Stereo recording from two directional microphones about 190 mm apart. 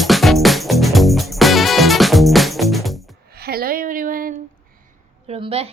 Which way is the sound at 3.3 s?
55° right (ahead or behind).